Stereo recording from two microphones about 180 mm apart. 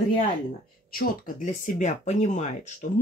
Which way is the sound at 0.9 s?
55° left (ahead or behind).